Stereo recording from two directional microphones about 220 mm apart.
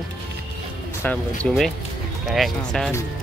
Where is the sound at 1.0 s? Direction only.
5° left (ahead or behind).